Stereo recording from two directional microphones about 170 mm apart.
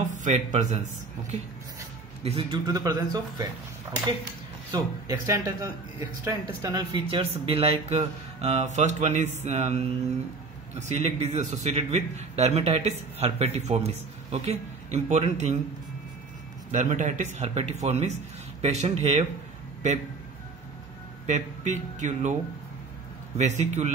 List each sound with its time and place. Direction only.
0.2 s speech: 45° right (ahead or behind)
2.2 s speech: 35° right (ahead or behind)
2.6 s speech: 20° right (ahead or behind)
4.7 s speech: 20° right (ahead or behind); by 15.5 s 40° right (ahead or behind)
16.7 s speech: 45° right (ahead or behind)
21.3 s speech: 45° right (ahead or behind)
23.3 s speech: 40° right (ahead or behind)